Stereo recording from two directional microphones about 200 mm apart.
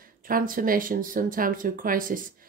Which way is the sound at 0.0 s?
45° right (ahead or behind).